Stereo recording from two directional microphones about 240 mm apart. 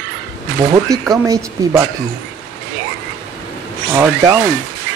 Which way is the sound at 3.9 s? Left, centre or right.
Centre.